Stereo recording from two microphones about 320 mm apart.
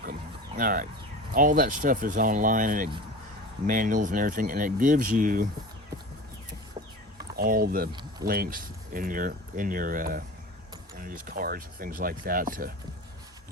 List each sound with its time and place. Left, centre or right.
0.0 s a sound: right
1.3 s speech: right
7.3 s speech: right